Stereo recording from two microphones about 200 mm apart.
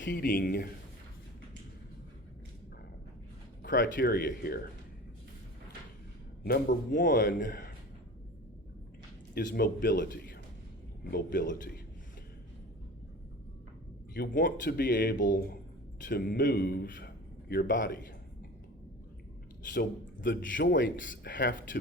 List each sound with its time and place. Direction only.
0.0 s speech: 50° left (ahead or behind)
3.6 s speech: 45° left (ahead or behind)
6.4 s speech: 45° left (ahead or behind)
9.3 s speech: 45° left (ahead or behind)
11.1 s speech: 45° left (ahead or behind)
14.1 s speech: 45° left (ahead or behind)
19.7 s a man's voice: 55° left (ahead or behind)
20.5 s speech: 45° left (ahead or behind)
21.1 s a man's voice: 65° left (ahead or behind)
21.5 s speech: 40° left (ahead or behind)